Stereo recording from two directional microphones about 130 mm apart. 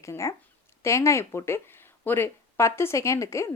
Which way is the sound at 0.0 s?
20° left (ahead or behind).